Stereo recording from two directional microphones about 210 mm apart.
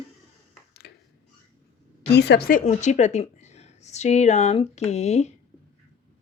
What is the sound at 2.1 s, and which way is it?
Speech, 50° left (ahead or behind).